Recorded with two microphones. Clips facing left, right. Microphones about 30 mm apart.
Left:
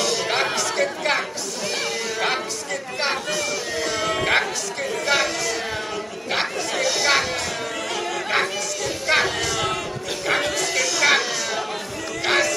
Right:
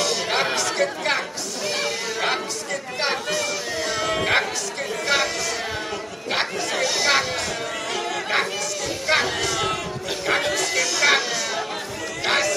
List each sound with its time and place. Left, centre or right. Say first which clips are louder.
0.0 s music: even; centre
1.8 s chatter: left 1 dB; centre
5.0 s a sound: left 1 dB; centre
6.3 s chatter: even; centre
7.9 s music: even; centre
10.2 s a sound: even; centre
12.3 s music: left 1 dB; centre